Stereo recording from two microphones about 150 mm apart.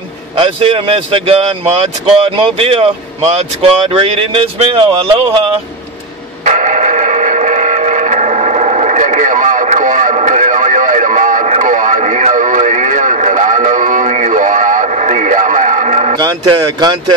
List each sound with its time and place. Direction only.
0.4 s speech: 35° right (ahead or behind)
3.9 s speech: 35° right (ahead or behind)
6.4 s a sound: 55° right (ahead or behind)
16.2 s speech: 30° right (ahead or behind)